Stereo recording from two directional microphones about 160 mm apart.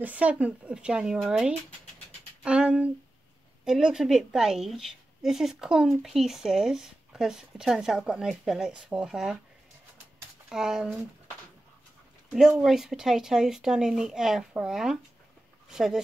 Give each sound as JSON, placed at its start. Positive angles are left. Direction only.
{"t": 0.0, "sound": "a woman's voice", "side_deg": -10}
{"t": 2.4, "sound": "a sound", "side_deg": -5}
{"t": 3.6, "sound": "a woman's voice", "side_deg": -5}
{"t": 10.5, "sound": "a woman's voice", "side_deg": -5}
{"t": 12.3, "sound": "a woman's voice", "side_deg": -5}